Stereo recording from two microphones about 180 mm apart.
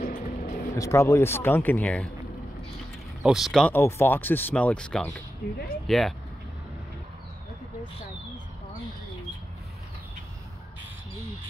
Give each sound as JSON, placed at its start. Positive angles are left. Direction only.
{"t": 0.0, "sound": "vehicle", "side_deg": 45}
{"t": 0.7, "sound": "speech", "side_deg": 15}
{"t": 3.2, "sound": "speech", "side_deg": -5}